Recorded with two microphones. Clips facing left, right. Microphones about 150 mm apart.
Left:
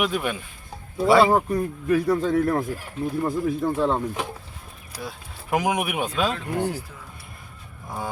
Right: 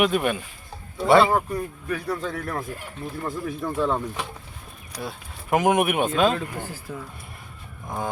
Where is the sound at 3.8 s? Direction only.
25° left (ahead or behind).